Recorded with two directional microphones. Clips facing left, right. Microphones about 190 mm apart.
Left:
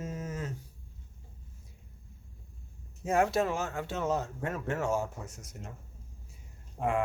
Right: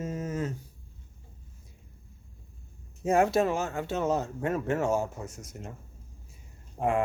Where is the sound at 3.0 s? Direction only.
25° right (ahead or behind).